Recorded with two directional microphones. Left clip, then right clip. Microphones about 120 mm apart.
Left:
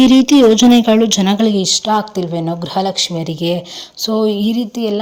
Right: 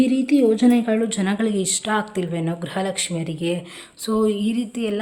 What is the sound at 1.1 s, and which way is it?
Speech, 55° left (ahead or behind).